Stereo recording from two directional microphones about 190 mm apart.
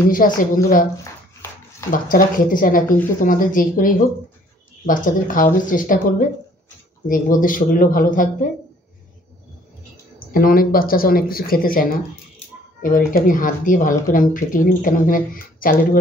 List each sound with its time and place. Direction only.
0.1 s speech: 45° left (ahead or behind)
1.9 s speech: 45° left (ahead or behind)
10.3 s speech: 50° left (ahead or behind)